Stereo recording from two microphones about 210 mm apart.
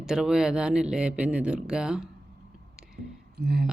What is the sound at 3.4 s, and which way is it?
Speech, 50° right (ahead or behind).